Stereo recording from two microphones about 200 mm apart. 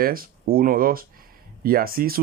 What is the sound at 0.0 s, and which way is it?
Speech, 45° right (ahead or behind).